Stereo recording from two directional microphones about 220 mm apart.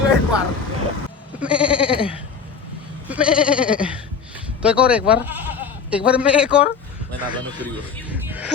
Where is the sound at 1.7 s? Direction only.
25° left (ahead or behind).